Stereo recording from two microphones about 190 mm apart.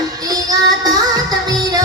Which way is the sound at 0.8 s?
20° right (ahead or behind).